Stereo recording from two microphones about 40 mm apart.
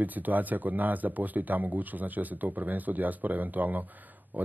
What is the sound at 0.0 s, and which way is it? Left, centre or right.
Speech, right.